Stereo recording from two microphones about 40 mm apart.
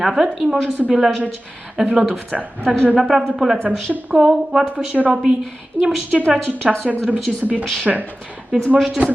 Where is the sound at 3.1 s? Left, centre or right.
Centre.